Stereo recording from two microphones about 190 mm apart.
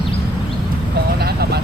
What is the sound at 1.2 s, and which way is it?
Vehicle, 60° right (ahead or behind).